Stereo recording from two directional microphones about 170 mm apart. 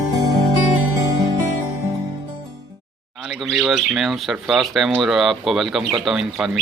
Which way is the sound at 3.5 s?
Centre (ahead or behind).